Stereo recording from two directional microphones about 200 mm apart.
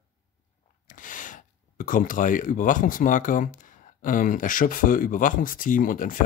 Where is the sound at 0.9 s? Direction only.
40° left (ahead or behind).